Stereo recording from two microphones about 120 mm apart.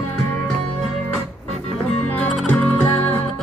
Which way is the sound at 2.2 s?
10° left (ahead or behind).